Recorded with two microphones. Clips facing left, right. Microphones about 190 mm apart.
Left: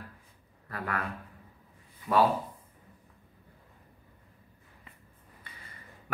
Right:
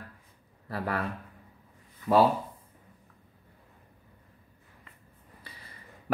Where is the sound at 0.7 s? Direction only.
30° right (ahead or behind).